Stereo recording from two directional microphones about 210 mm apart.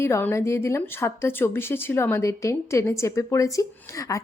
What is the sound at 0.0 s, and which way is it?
A woman's voice, 10° left (ahead or behind).